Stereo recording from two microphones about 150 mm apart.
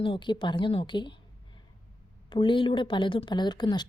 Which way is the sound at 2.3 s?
35° left (ahead or behind).